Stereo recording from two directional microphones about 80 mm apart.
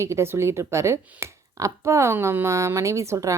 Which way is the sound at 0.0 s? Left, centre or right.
Right.